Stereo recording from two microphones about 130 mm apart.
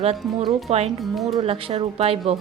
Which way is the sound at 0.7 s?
55° right (ahead or behind).